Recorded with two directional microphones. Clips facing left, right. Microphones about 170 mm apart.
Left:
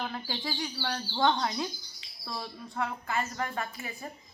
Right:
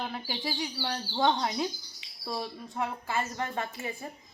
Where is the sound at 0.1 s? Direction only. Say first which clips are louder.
Right 1 dB; 10° right (ahead or behind).